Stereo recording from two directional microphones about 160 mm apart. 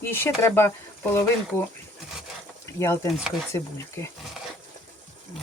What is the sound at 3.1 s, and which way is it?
Stir, 5° right (ahead or behind).